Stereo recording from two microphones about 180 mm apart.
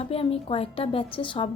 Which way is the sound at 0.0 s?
30° left (ahead or behind).